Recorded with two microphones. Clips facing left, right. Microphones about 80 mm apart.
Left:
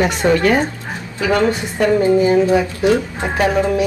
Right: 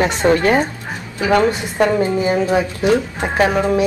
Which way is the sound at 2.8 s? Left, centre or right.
Right.